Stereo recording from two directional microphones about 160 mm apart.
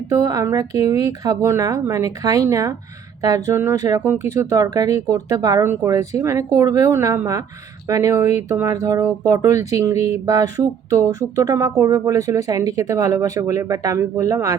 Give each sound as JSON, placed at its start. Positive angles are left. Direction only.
{"t": 0.1, "sound": "speech", "side_deg": -20}